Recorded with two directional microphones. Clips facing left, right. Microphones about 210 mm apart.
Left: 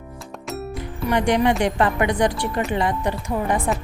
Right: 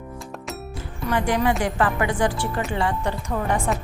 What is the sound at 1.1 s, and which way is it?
Speech, 25° left (ahead or behind).